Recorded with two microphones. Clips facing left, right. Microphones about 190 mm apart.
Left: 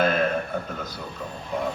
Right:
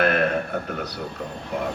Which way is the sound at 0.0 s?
70° right (ahead or behind).